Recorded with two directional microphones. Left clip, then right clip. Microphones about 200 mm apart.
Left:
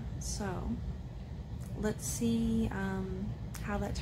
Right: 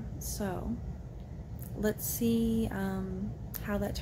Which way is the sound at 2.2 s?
30° right (ahead or behind).